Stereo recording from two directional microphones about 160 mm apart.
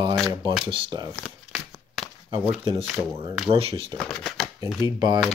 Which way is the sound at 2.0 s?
5° right (ahead or behind).